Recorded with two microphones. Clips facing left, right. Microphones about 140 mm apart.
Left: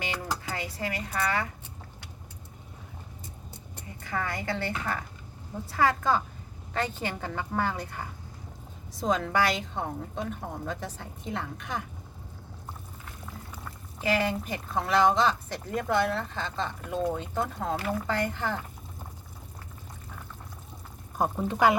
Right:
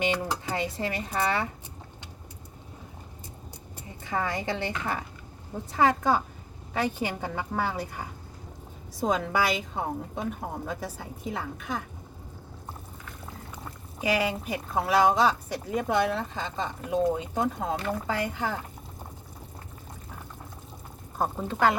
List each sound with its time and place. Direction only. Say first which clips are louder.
0.0 s speech: right 5 dB; 20° right (ahead or behind)
4.0 s speech: right 3 dB; 20° right (ahead or behind); by 11.8 s centre (ahead or behind)
14.0 s speech: even; 10° right (ahead or behind)
21.2 s speech: left 1 dB; 10° left (ahead or behind)